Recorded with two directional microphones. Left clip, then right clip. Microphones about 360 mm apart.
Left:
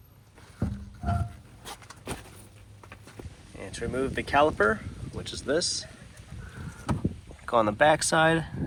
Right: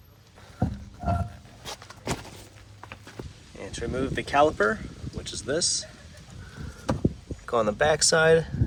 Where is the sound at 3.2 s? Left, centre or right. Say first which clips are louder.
Right 4 dB; right.